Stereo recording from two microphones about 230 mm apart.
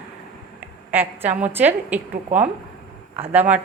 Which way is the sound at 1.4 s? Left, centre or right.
Centre.